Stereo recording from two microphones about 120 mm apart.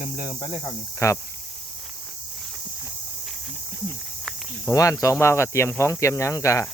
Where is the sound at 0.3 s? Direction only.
40° left (ahead or behind).